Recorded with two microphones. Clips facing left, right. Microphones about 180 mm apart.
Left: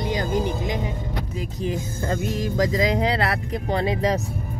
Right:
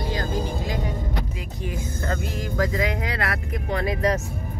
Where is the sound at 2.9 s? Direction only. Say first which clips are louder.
Left 5 dB; 30° left (ahead or behind).